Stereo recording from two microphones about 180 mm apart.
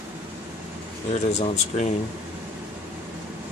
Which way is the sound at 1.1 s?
40° left (ahead or behind).